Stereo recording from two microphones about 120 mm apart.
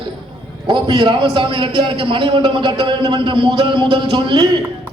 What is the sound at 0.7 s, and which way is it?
A man's voice, 40° right (ahead or behind).